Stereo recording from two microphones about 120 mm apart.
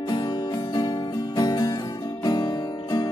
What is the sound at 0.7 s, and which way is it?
Music, 35° left (ahead or behind).